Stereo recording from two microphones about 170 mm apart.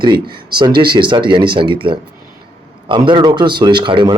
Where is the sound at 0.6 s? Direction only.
25° right (ahead or behind).